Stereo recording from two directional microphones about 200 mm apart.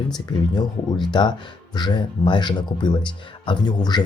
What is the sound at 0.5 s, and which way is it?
Speech, 20° left (ahead or behind).